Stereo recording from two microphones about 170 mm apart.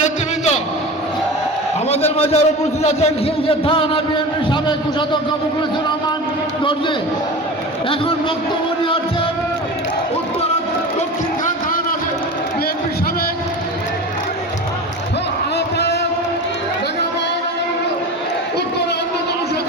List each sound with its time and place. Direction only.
1.9 s a man's voice: 35° left (ahead or behind)
6.6 s a man's voice: 30° left (ahead or behind)
15.5 s a sound: 80° left